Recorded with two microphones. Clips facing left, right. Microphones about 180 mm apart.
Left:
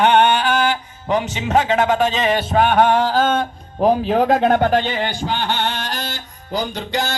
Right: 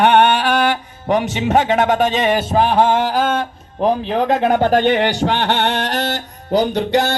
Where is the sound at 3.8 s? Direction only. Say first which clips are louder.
Left 1 dB; 5° left (ahead or behind).